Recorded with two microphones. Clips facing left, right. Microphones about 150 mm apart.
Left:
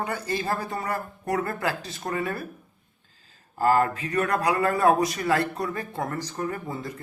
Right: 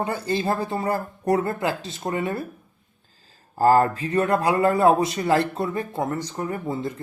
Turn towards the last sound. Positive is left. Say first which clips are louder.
# right 4 dB
turn(degrees=-20)  # may be behind; listen again after turning